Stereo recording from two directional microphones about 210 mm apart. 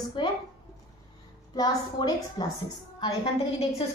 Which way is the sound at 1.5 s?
20° left (ahead or behind).